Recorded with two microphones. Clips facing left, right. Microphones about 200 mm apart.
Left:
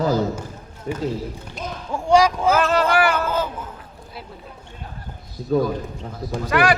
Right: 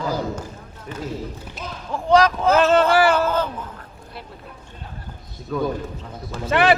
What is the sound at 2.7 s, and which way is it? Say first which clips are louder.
Speech: right 3 dB; 25° right (ahead or behind).